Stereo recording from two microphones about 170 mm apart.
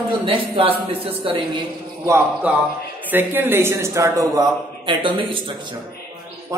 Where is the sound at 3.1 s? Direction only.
10° right (ahead or behind); by 5.8 s 30° right (ahead or behind).